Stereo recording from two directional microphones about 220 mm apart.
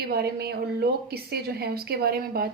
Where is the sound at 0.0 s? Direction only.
45° right (ahead or behind).